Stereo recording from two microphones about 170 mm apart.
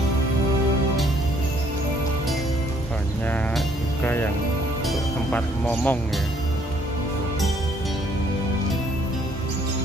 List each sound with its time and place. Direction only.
3.3 s music: 10° left (ahead or behind)